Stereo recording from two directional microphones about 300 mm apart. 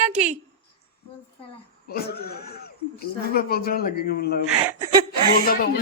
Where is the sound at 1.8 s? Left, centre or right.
Left.